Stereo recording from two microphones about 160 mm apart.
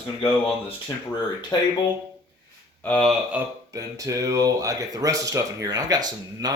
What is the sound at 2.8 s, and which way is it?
Speech, 5° left (ahead or behind).